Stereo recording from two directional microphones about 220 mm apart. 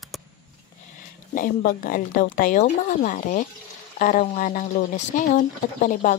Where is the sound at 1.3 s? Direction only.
40° left (ahead or behind).